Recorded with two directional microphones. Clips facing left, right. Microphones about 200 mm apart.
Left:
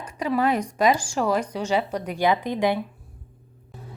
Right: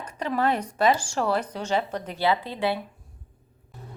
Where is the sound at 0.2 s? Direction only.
10° left (ahead or behind).